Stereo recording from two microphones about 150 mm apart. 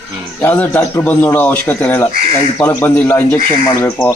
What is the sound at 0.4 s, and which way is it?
Speech, 10° left (ahead or behind).